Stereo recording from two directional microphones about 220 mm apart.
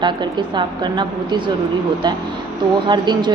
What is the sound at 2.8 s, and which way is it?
Speech, 20° right (ahead or behind).